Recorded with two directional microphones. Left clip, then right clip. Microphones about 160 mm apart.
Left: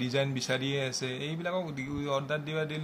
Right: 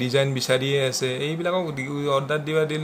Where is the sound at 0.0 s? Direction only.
10° right (ahead or behind).